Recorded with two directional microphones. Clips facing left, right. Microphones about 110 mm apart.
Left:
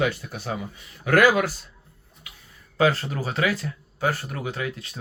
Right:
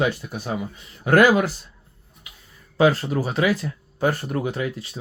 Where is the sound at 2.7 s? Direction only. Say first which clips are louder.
Right 3 dB; 15° right (ahead or behind).